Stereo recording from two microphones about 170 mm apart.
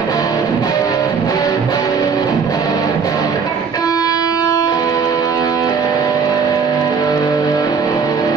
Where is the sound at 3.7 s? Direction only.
20° left (ahead or behind).